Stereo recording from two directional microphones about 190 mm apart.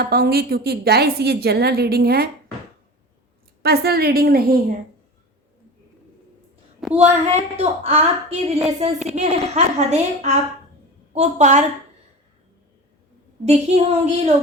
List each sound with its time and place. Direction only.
0.0 s a woman's voice: 55° right (ahead or behind)
3.6 s a woman's voice: 55° right (ahead or behind)
6.8 s a sound: centre (ahead or behind)
7.6 s a woman's voice: 35° right (ahead or behind)
13.4 s a woman's voice: 35° right (ahead or behind)